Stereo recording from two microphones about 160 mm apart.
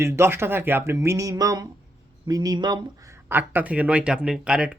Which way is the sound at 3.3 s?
10° right (ahead or behind).